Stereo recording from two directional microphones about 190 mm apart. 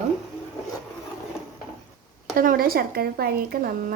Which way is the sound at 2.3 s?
50° right (ahead or behind).